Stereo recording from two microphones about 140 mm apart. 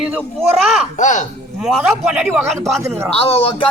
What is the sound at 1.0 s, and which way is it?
Speech, 60° left (ahead or behind).